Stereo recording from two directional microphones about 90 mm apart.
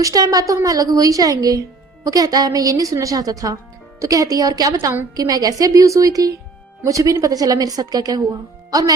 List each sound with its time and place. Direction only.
0.0 s a woman's voice: 40° right (ahead or behind)